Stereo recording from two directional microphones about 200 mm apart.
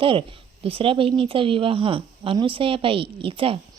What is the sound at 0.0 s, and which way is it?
A woman's voice, 25° right (ahead or behind).